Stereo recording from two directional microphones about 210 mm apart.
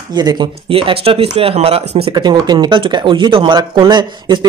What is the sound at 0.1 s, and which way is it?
Speech, 20° right (ahead or behind).